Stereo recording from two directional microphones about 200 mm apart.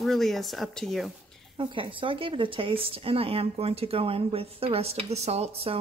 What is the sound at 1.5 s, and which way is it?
A woman's voice, 25° right (ahead or behind).